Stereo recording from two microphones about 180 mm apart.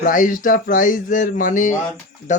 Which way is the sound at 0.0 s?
50° left (ahead or behind).